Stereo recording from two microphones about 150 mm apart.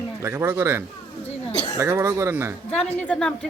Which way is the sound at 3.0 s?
5° left (ahead or behind).